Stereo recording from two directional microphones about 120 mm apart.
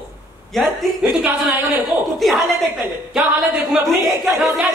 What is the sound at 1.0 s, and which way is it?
Speech, 10° right (ahead or behind).